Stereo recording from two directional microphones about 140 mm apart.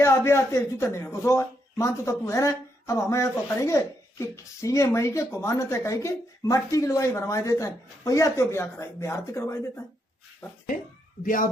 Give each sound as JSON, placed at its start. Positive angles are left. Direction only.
{"t": 0.0, "sound": "speech", "side_deg": 20}